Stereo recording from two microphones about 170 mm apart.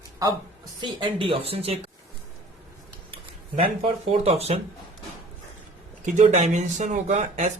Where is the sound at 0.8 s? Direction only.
30° right (ahead or behind).